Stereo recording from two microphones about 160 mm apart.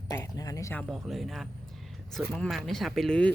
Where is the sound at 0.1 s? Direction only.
20° left (ahead or behind).